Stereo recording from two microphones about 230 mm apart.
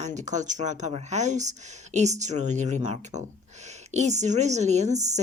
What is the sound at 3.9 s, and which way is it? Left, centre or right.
A woman's voice, right.